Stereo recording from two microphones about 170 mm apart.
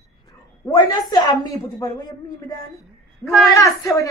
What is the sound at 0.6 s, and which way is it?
A woman's voice, 25° left (ahead or behind).